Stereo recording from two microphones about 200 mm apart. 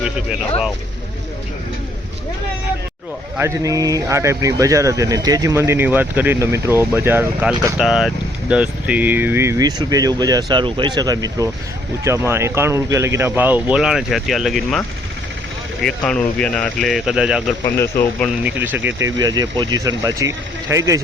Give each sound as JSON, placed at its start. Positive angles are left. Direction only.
{"t": 3.3, "sound": "speech", "side_deg": -15}